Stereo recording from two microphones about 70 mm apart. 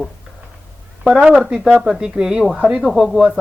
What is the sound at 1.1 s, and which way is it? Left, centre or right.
A woman's voice, centre.